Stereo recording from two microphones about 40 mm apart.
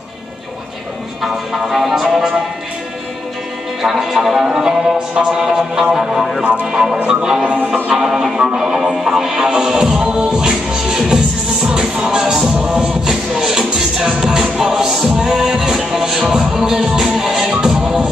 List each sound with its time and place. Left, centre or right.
1.2 s speech: centre
3.8 s music: centre
6.6 s speech: centre
7.1 s music: centre